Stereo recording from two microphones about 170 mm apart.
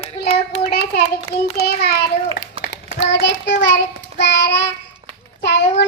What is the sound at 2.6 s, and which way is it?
Child singing, 85° left.